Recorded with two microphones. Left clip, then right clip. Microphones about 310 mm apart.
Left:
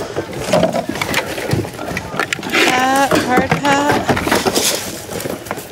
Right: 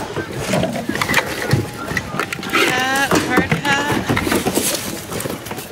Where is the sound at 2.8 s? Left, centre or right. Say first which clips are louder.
Left 3 dB; centre.